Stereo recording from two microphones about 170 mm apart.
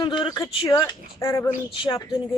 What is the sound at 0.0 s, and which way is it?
Speech, 25° left (ahead or behind).